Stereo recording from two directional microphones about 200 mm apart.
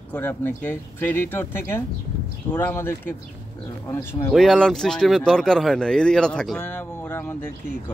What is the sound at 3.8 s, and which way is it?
Speech, 20° left (ahead or behind).